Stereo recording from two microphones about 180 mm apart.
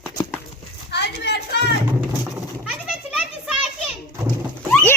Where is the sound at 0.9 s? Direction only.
70° left (ahead or behind).